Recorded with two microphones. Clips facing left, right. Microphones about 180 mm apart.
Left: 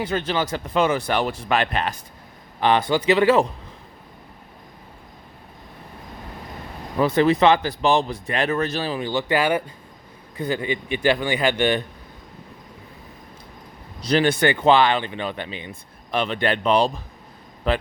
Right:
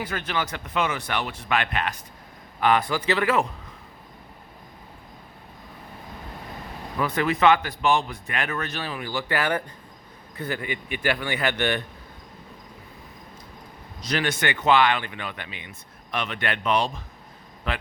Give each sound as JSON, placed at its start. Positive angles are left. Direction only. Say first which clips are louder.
{"t": 0.0, "sound": "a man's voice", "louder": "left 5 dB", "side_deg": 25}
{"t": 6.9, "sound": "speech", "louder": "left 7 dB", "side_deg": 30}
{"t": 14.0, "sound": "speech", "louder": "left 7 dB", "side_deg": 30}